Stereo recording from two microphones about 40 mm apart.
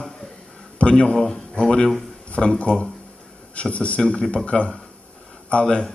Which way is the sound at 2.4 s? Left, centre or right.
Centre.